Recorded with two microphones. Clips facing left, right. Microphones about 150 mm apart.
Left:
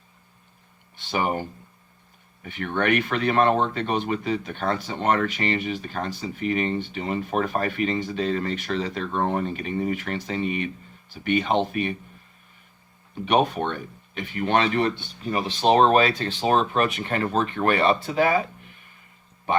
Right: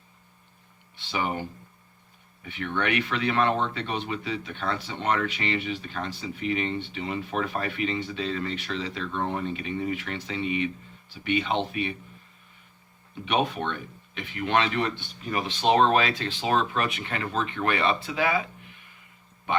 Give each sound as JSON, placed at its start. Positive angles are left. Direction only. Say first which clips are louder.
{"t": 0.9, "sound": "speech", "louder": "left 4 dB", "side_deg": 45}
{"t": 13.2, "sound": "speech", "louder": "left 5 dB", "side_deg": 40}
{"t": 19.5, "sound": "a sound", "louder": "left 4 dB", "side_deg": 40}